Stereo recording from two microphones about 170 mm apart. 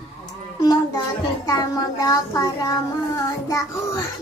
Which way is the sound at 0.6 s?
25° left (ahead or behind).